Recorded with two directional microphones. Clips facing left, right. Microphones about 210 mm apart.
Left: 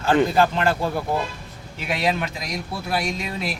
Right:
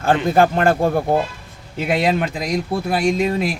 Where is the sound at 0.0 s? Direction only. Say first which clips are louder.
Right 2 dB; 50° right (ahead or behind).